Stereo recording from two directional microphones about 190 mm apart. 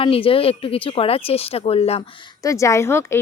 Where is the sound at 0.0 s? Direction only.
30° left (ahead or behind).